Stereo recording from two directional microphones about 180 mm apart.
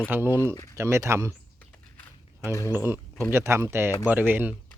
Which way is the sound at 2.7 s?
15° right (ahead or behind).